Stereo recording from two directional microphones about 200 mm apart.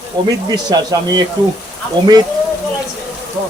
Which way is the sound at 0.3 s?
20° right (ahead or behind).